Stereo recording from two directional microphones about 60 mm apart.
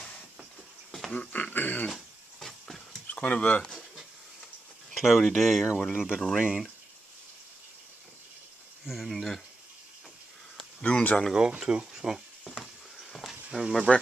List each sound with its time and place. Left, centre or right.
1.3 s speech: left
2.4 s a sound: centre
3.1 s speech: left
4.9 s speech: centre
5.9 s speech: centre
8.8 s speech: centre
10.8 s speech: left
11.3 s speech: centre
12.4 s a sound: centre